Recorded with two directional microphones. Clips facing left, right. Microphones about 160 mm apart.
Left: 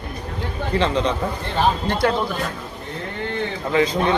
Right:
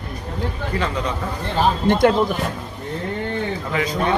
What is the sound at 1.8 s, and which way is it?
Speech, 20° right (ahead or behind).